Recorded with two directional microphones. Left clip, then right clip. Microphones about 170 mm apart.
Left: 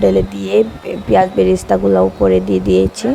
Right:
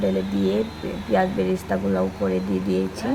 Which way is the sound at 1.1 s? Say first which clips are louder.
Left 10 dB; 35° left (ahead or behind).